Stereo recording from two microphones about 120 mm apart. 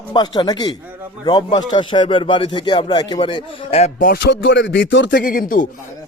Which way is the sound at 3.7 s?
60° left (ahead or behind).